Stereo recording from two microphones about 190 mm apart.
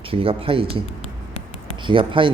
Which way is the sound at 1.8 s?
25° right (ahead or behind).